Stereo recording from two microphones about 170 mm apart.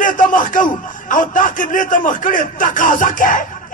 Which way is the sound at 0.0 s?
50° left (ahead or behind).